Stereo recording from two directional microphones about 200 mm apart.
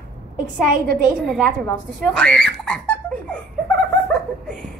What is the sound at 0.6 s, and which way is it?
Speech, 50° right (ahead or behind).